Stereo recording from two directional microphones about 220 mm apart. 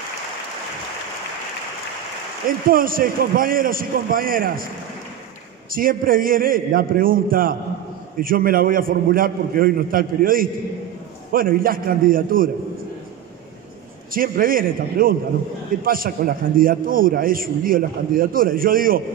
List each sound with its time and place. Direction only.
2.7 s a man's voice: 40° right (ahead or behind)
5.7 s a man's voice: 40° right (ahead or behind)
14.1 s a man's voice: 40° right (ahead or behind)